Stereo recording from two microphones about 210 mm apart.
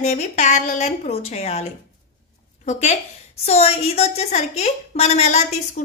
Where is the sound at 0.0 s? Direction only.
35° left (ahead or behind).